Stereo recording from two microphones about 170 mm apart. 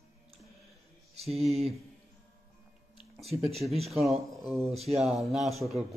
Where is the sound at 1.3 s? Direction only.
Centre (ahead or behind).